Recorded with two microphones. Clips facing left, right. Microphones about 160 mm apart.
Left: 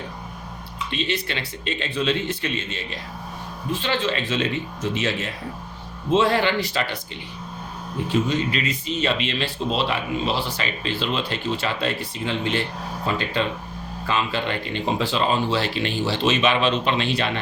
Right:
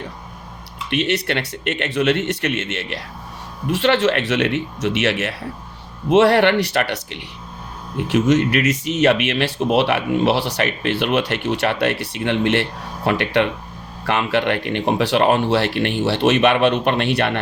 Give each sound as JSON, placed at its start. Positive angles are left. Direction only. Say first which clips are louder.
{"t": 0.9, "sound": "speech", "louder": "right 7 dB", "side_deg": -70}